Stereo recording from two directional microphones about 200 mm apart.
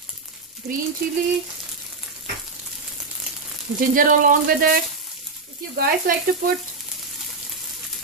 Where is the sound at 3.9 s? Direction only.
45° right (ahead or behind).